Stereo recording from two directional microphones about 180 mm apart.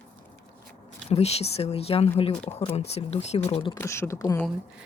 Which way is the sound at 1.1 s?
35° left (ahead or behind).